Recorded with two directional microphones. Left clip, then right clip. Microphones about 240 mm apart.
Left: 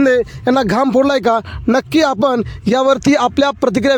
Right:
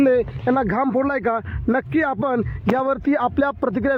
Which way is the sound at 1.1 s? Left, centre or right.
Left.